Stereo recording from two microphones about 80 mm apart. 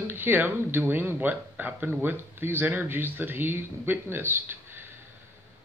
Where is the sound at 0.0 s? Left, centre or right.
Right.